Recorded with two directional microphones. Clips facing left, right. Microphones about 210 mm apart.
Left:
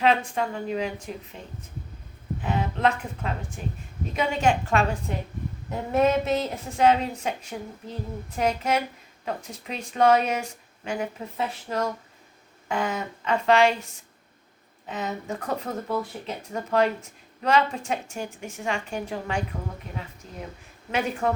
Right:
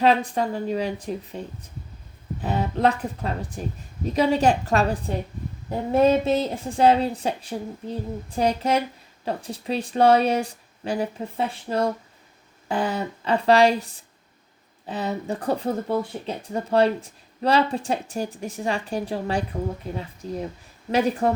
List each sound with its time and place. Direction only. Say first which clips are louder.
0.0 s speech: right 3 dB; 35° right (ahead or behind)
2.4 s speech: right 3 dB; 35° right (ahead or behind)
14.8 s speech: right 4 dB; 35° right (ahead or behind)